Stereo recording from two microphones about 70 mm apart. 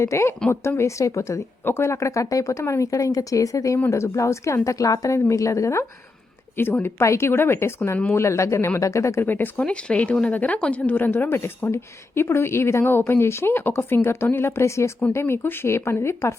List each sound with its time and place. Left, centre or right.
0.0 s speech: left
3.8 s speech: left
6.6 s a woman's voice: left
9.2 s speech: left
11.3 s a woman's voice: left